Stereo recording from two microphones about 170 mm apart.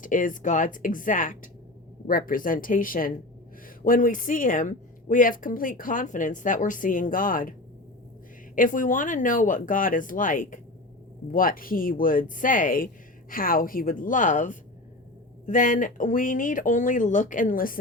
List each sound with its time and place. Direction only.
0.0 s speech: 50° left (ahead or behind)
8.5 s speech: 50° left (ahead or behind)